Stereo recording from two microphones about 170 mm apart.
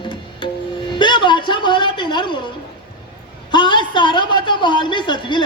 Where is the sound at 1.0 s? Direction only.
30° left (ahead or behind).